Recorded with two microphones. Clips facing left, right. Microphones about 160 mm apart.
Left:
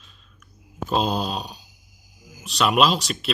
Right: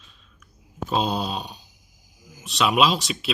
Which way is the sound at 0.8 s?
Centre (ahead or behind).